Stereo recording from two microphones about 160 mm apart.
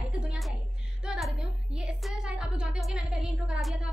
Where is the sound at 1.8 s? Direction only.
5° right (ahead or behind).